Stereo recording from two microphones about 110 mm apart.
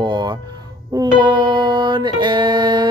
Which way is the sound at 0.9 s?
40° right (ahead or behind).